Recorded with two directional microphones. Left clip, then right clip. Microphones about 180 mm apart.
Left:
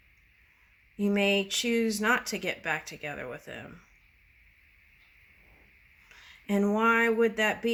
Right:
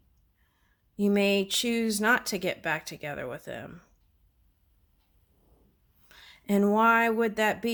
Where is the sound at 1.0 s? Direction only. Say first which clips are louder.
Right 1 dB; 65° right (ahead or behind).